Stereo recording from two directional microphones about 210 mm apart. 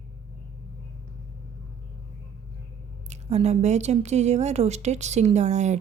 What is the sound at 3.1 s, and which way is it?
A woman's voice, 30° right (ahead or behind).